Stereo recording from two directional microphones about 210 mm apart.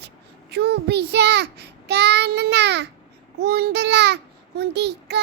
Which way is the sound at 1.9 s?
55° right (ahead or behind).